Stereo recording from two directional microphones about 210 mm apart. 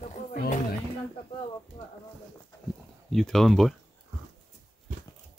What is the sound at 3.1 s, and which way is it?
Speech, centre (ahead or behind).